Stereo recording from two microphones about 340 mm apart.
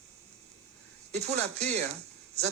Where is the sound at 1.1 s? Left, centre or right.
Centre.